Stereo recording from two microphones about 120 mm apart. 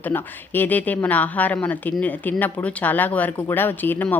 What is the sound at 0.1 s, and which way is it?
Speech, 15° left (ahead or behind).